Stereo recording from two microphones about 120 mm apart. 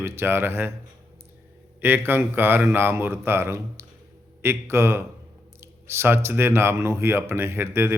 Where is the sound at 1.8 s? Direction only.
15° right (ahead or behind).